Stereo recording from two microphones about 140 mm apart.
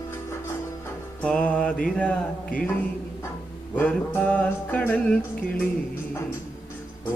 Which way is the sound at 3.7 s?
10° left (ahead or behind).